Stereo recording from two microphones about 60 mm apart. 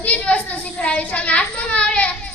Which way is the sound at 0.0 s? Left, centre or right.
Left.